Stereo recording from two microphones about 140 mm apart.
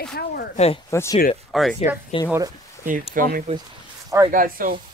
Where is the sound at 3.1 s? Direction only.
90° right.